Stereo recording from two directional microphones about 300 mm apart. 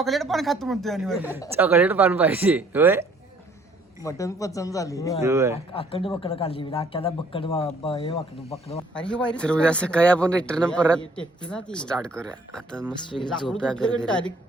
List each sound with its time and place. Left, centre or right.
0.0 s speech: centre
4.0 s a man's voice: centre
5.2 s speech: centre
5.7 s a man's voice: centre
9.0 s speech: centre